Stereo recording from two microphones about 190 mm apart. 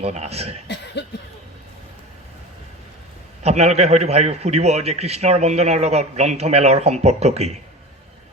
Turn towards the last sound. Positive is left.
turn(degrees=-35)  # may be behind; listen again after turning